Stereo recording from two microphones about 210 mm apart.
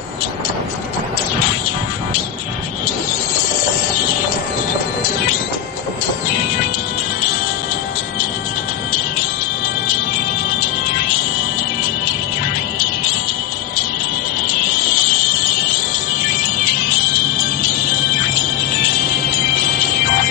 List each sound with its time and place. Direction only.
14.7 s music: 45° left (ahead or behind)